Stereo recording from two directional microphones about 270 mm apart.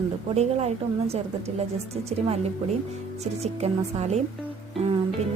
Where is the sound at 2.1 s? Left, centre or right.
Right.